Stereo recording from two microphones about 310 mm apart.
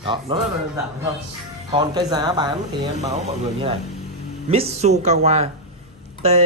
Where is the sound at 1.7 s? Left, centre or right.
Centre.